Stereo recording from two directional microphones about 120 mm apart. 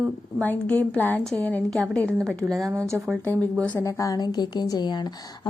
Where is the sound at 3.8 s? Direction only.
25° left (ahead or behind).